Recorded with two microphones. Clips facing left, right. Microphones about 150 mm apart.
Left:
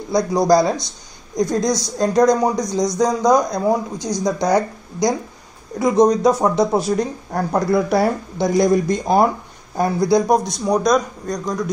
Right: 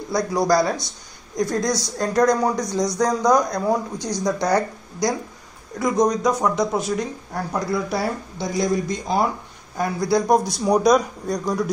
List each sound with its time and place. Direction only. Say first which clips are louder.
0.1 s speech: left 4 dB; 20° left (ahead or behind)
5.8 s speech: left 5 dB; 30° left (ahead or behind); by 9.3 s 50° left (ahead or behind)
9.8 s speech: left 5 dB; 35° left (ahead or behind)
10.2 s a man's voice: left 1 dB; centre (ahead or behind)